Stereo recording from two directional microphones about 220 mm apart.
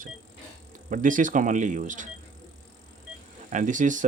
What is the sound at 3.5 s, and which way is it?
Speech, 35° right (ahead or behind).